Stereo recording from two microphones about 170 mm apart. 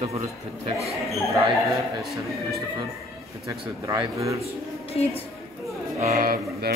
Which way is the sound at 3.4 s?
20° right (ahead or behind).